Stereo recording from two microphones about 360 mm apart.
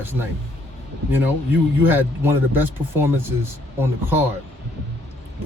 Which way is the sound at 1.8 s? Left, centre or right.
Centre.